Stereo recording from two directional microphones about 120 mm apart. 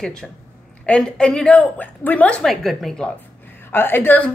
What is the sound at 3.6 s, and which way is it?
Speech, 20° left (ahead or behind).